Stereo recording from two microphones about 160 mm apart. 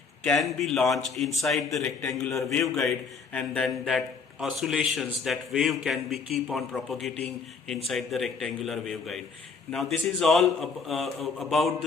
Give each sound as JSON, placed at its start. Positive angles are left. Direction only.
{"t": 0.3, "sound": "a man's voice", "side_deg": 0}
{"t": 2.0, "sound": "a man's voice", "side_deg": 15}
{"t": 2.5, "sound": "a man's voice", "side_deg": 0}